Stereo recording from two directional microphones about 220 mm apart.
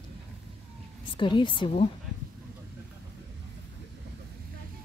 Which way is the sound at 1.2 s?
20° left (ahead or behind).